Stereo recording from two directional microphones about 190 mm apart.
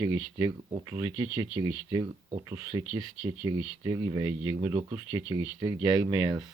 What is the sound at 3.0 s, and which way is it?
Speech, 15° right (ahead or behind).